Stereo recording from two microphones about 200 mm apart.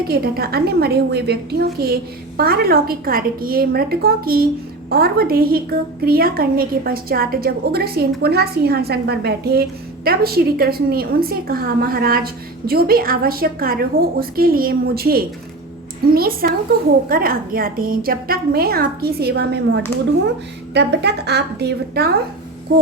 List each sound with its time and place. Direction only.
0.1 s a woman's voice: 50° right (ahead or behind)